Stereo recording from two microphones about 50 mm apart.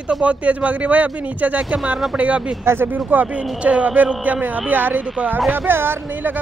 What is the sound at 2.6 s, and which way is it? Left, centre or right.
Speech, right.